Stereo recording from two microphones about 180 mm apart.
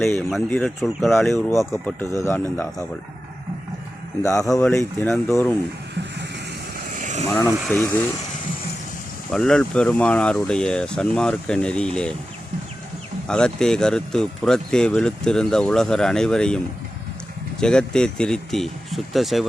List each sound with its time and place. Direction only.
0.3 s speech: 5° left (ahead or behind)
1.5 s speech: 15° left (ahead or behind)
4.9 s speech: 5° left (ahead or behind)
6.9 s vehicle: 45° right (ahead or behind)
7.3 s speech: 15° left (ahead or behind)
9.3 s speech: 5° left (ahead or behind)
13.2 s speech: 5° left (ahead or behind)
17.6 s speech: 5° left (ahead or behind)